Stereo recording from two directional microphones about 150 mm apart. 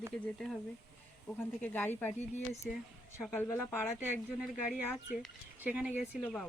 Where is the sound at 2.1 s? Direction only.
45° left (ahead or behind).